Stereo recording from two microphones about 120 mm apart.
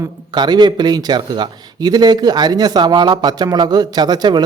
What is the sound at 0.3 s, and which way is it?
Speech, 35° right (ahead or behind).